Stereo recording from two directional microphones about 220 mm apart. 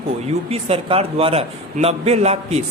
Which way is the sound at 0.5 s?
25° right (ahead or behind).